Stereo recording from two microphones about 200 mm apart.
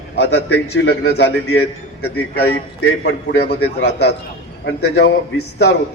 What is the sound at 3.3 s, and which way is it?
A man's voice, 55° left (ahead or behind).